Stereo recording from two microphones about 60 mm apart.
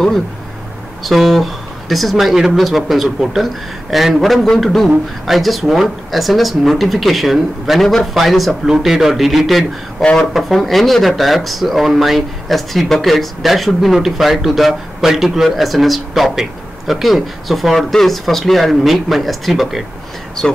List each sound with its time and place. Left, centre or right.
1.0 s speech: centre
20.4 s speech: centre